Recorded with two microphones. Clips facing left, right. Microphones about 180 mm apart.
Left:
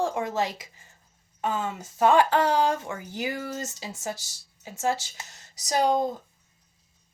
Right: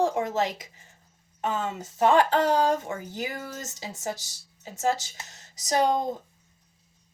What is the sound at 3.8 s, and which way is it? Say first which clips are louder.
Speech: right 1 dB; 15° right (ahead or behind).